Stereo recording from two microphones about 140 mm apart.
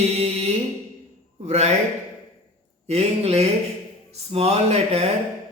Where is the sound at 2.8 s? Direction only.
50° right (ahead or behind).